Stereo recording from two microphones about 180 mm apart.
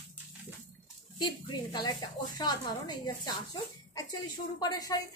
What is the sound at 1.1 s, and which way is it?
A woman's voice, 25° left (ahead or behind).